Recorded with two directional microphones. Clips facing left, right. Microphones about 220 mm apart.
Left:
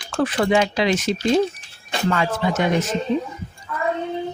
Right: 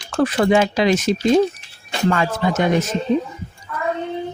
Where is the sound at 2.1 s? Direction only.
45° right (ahead or behind).